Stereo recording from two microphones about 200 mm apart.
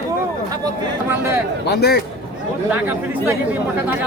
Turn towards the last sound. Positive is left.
turn(degrees=-10)  # may be behind; listen again after turning